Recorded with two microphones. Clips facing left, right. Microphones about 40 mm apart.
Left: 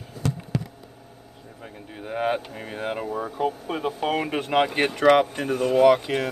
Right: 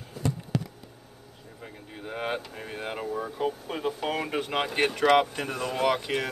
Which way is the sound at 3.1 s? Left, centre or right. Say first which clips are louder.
Left 3 dB; left.